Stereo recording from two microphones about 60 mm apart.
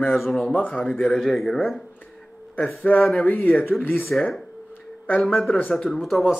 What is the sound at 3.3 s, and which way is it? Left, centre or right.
Speech, left.